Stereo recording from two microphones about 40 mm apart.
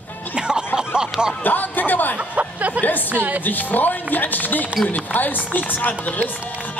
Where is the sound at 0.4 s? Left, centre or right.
Right.